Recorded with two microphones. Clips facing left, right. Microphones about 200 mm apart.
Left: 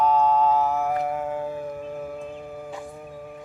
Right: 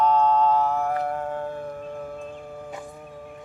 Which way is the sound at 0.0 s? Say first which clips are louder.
Even; 5° left (ahead or behind).